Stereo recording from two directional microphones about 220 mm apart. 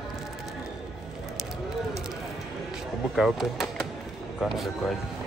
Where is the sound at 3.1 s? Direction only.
Centre (ahead or behind).